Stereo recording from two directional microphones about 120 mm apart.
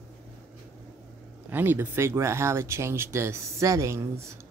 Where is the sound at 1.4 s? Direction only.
15° right (ahead or behind).